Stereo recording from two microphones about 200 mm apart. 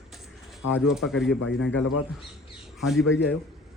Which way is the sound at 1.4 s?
70° left (ahead or behind).